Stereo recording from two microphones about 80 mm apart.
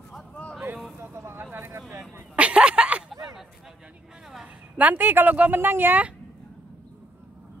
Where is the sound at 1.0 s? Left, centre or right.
Right.